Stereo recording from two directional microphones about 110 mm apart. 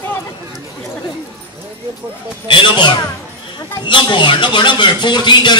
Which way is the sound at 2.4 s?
45° left (ahead or behind).